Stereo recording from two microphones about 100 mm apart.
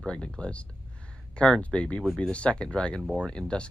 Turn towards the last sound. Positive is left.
turn(degrees=10)  # may be behind; listen again after turning